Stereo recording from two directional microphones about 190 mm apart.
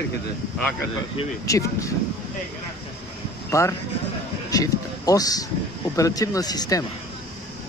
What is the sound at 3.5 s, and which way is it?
Speech, 15° left (ahead or behind).